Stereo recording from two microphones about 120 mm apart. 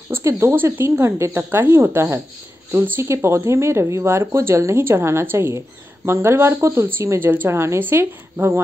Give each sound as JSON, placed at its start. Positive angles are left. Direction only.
{"t": 0.1, "sound": "speech", "side_deg": -20}